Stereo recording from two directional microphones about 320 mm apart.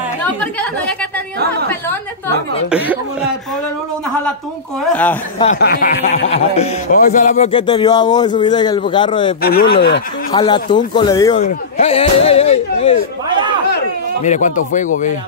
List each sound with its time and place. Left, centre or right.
0.2 s a woman's voice: centre
5.4 s speech: left
9.4 s speech: left
10.3 s speech: centre
14.2 s speech: left